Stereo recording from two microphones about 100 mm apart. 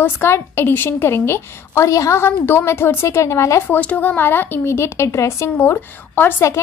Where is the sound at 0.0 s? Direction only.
25° left (ahead or behind).